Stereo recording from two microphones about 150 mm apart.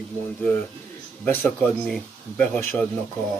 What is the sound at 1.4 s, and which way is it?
Speech, 5° left (ahead or behind).